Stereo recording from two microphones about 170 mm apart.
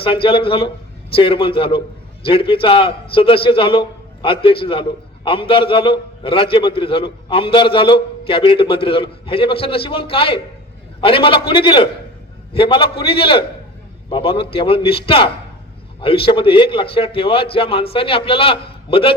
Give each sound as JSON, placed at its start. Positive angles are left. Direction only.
{"t": 0.0, "sound": "a man's voice", "side_deg": 30}